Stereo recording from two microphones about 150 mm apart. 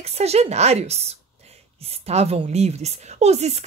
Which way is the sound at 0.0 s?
45° right (ahead or behind).